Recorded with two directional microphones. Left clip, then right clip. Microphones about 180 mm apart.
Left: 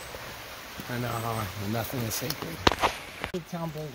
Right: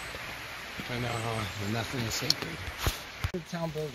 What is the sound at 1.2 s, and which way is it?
Speech, 50° left (ahead or behind).